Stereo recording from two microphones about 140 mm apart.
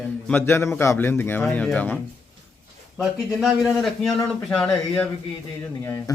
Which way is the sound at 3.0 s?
5° right (ahead or behind).